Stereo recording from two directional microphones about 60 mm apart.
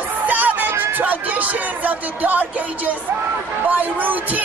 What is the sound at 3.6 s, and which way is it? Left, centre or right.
Speech, right.